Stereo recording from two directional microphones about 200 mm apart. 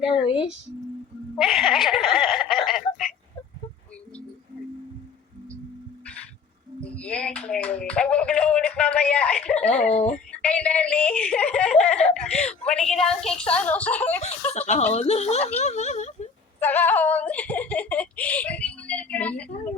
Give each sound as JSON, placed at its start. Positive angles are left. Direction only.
{"t": 1.4, "sound": "speech", "side_deg": 0}
{"t": 2.6, "sound": "a sound", "side_deg": 0}
{"t": 6.8, "sound": "speech", "side_deg": 5}
{"t": 14.7, "sound": "speech", "side_deg": 30}
{"t": 16.6, "sound": "speech", "side_deg": 10}